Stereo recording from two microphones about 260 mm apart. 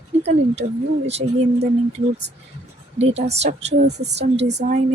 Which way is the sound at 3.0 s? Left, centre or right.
Right.